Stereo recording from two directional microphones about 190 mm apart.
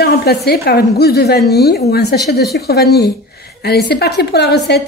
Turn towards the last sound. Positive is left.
turn(degrees=60)  # may be behind; listen again after turning